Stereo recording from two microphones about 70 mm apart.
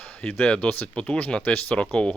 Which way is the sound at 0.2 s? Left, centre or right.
Centre.